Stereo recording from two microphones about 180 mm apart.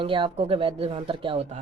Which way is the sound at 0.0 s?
30° right (ahead or behind).